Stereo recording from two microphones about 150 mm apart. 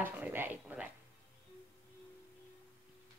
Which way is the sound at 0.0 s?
15° right (ahead or behind).